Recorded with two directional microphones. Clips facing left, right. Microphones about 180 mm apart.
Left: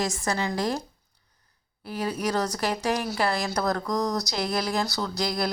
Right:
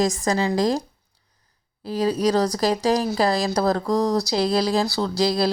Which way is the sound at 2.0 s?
35° right (ahead or behind).